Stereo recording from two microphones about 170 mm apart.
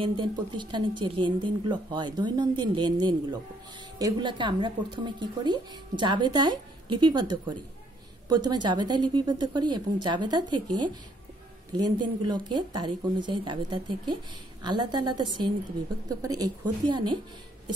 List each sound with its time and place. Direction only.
0.0 s a woman's voice: 30° right (ahead or behind)